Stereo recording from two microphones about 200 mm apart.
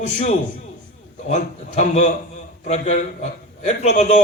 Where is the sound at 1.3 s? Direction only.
35° left (ahead or behind).